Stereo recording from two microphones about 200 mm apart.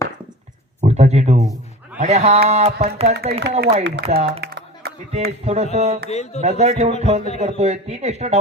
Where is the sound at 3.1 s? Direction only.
55° right (ahead or behind).